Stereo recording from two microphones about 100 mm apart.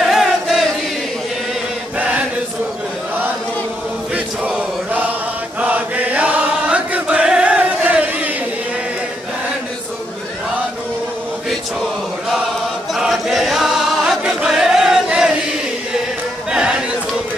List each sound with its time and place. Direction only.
0.0 s chant: 5° right (ahead or behind)
2.0 s chant: 15° right (ahead or behind)
4.1 s chant: 15° right (ahead or behind)
11.8 s chant: 5° right (ahead or behind)
12.9 s music: centre (ahead or behind)